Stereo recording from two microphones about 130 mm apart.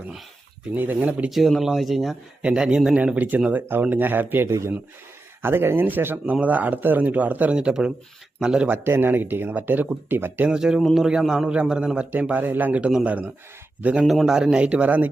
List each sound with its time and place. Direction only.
0.8 s speech: 15° right (ahead or behind)
14.0 s speech: centre (ahead or behind)